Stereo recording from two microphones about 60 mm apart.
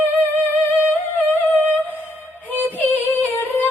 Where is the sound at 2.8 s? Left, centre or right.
Left.